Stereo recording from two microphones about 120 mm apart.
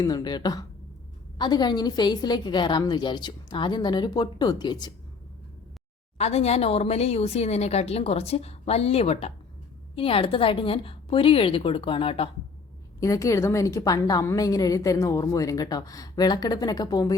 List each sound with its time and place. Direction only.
0.0 s a woman's voice: 30° left (ahead or behind)
6.1 s a woman's voice: 65° left (ahead or behind)
13.0 s a woman's voice: 25° left (ahead or behind)